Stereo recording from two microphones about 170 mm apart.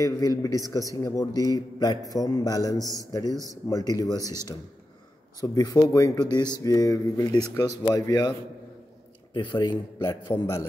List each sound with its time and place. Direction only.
0.0 s a man's voice: 20° left (ahead or behind)
4.2 s speech: 15° right (ahead or behind)
5.4 s a man's voice: 20° left (ahead or behind)